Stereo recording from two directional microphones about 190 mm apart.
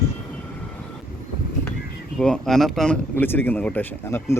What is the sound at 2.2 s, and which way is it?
Speech, centre (ahead or behind).